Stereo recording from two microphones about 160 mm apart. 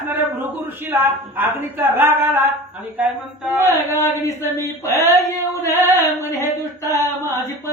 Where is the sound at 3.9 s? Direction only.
15° left (ahead or behind).